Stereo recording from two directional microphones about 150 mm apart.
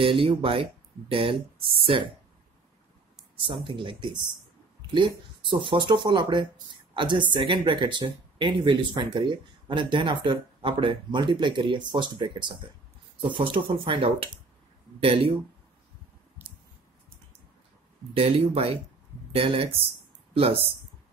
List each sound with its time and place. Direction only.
0.0 s speech: 35° right (ahead or behind)
3.4 s speech: 35° right (ahead or behind)
16.4 s clicking: 15° right (ahead or behind)
18.1 s speech: 40° right (ahead or behind)